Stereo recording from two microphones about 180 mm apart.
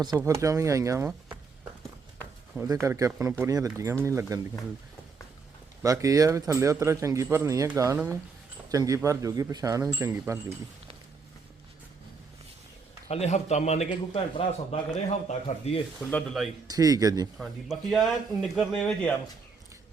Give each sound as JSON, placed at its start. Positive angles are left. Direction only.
{"t": 0.2, "sound": "a man's voice", "side_deg": -15}
{"t": 2.8, "sound": "a man's voice", "side_deg": -15}
{"t": 5.8, "sound": "a man's voice", "side_deg": -20}
{"t": 13.1, "sound": "a man's voice", "side_deg": 35}
{"t": 16.0, "sound": "speech", "side_deg": 5}
{"t": 16.6, "sound": "speech", "side_deg": -20}
{"t": 17.3, "sound": "speech", "side_deg": 0}